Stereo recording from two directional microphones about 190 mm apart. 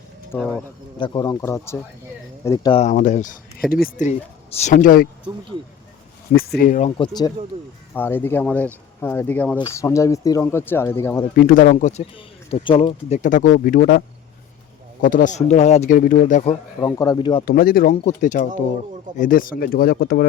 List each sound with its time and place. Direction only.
0.3 s speech: centre (ahead or behind)
0.9 s speech: 25° left (ahead or behind)
2.7 s speech: 40° left (ahead or behind)
6.3 s speech: 50° left (ahead or behind)
7.9 s speech: 10° left (ahead or behind)
11.3 s speech: 45° left (ahead or behind); by 13.1 s 30° left (ahead or behind)
13.1 s speech: 40° left (ahead or behind)
15.0 s speech: 45° left (ahead or behind)
16.8 s speech: 20° left (ahead or behind)
17.4 s speech: 50° left (ahead or behind)